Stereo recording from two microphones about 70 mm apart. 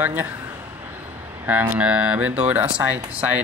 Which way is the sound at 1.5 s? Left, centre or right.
Right.